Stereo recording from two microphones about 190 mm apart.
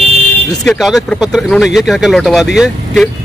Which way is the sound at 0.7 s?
Centre (ahead or behind).